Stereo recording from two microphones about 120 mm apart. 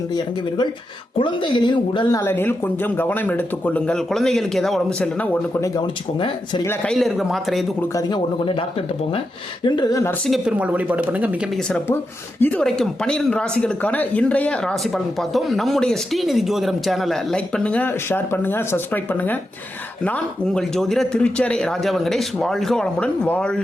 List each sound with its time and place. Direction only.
0.1 s speech: 35° left (ahead or behind)
2.1 s speech: 20° left (ahead or behind)
5.5 s speech: 25° left (ahead or behind)
6.1 s speech: 45° left (ahead or behind)
6.8 s speech: centre (ahead or behind)
9.6 s speech: 35° left (ahead or behind)
10.2 s speech: centre (ahead or behind)
10.6 s speech: 10° right (ahead or behind)
12.4 s speech: 15° left (ahead or behind)